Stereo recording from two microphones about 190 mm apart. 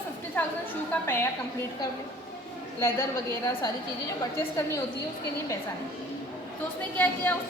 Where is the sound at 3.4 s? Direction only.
20° left (ahead or behind).